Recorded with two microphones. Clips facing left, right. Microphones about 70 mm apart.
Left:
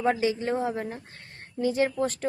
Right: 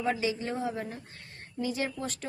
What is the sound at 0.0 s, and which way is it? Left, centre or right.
Speech, left.